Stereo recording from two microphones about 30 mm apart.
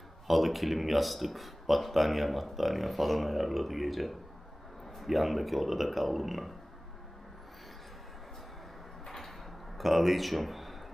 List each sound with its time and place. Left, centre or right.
0.3 s speech: centre
9.0 s sliding door: centre
9.7 s speech: centre